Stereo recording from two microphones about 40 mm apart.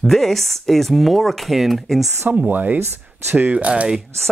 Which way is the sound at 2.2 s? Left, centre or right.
Right.